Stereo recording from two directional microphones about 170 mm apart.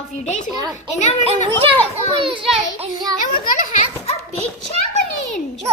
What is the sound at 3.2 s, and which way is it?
Speech, 50° left (ahead or behind).